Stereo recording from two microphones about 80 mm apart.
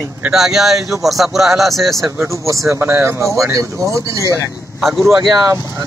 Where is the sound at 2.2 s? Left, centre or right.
Right.